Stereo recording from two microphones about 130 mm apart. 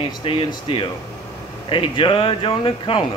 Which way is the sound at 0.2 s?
45° left (ahead or behind).